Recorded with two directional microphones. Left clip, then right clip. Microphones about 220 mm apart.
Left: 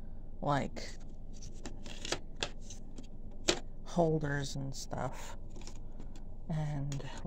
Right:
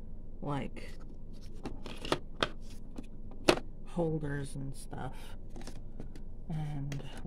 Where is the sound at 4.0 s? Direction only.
25° left (ahead or behind).